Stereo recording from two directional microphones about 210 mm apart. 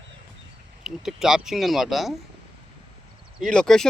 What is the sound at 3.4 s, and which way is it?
Speech, 5° left (ahead or behind).